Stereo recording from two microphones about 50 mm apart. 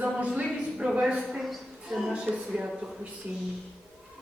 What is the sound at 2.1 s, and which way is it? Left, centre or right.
Speech, centre.